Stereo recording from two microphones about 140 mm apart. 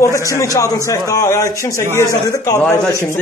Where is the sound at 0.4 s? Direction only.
25° left (ahead or behind).